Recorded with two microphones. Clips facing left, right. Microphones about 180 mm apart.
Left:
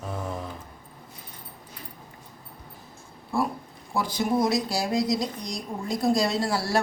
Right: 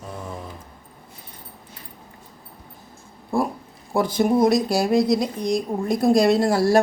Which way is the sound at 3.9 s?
55° right (ahead or behind).